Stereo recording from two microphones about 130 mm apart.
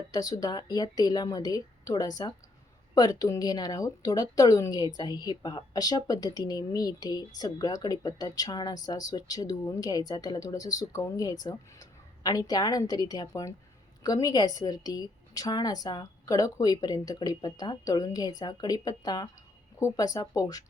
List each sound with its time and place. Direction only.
0.1 s speech: 30° left (ahead or behind)